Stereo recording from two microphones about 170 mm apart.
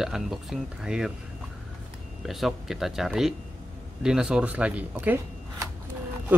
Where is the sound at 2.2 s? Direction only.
Centre (ahead or behind).